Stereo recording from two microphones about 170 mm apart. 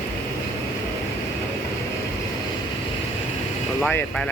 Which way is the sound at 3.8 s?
5° left (ahead or behind).